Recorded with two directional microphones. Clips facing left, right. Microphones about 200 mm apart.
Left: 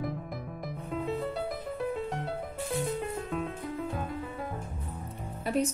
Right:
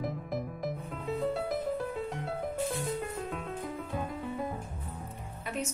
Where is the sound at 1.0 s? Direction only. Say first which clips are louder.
Right 3 dB; centre (ahead or behind).